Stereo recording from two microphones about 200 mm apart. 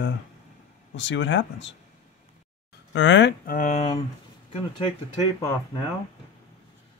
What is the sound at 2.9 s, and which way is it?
Speech, 65° left (ahead or behind).